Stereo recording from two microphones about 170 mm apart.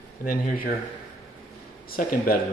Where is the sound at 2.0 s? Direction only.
55° left (ahead or behind).